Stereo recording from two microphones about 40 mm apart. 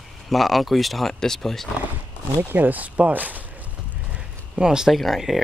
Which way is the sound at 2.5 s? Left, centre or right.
Right.